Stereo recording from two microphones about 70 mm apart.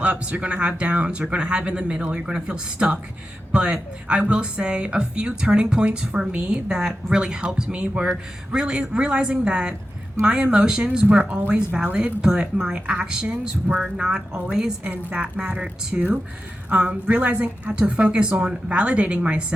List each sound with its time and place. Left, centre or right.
0.0 s speech: centre